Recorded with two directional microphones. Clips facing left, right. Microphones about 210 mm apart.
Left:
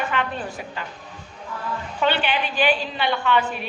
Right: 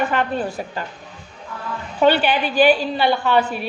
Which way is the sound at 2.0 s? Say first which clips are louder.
Right 7 dB; 40° right (ahead or behind).